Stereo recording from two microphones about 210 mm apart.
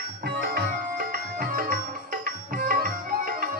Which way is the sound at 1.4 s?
40° right (ahead or behind).